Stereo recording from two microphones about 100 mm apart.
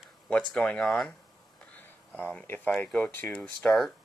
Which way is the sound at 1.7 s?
15° left (ahead or behind).